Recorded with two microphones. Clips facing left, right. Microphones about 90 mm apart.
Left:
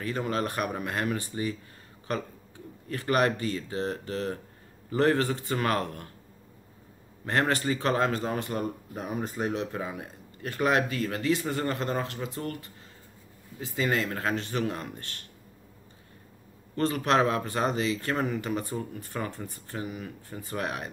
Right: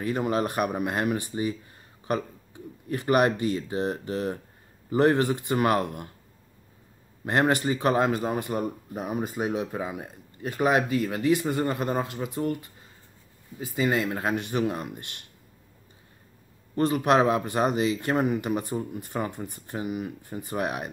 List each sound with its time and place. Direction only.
0.0 s speech: 15° right (ahead or behind)
7.2 s speech: 15° right (ahead or behind)
13.6 s speech: 5° right (ahead or behind)
16.7 s speech: 15° right (ahead or behind)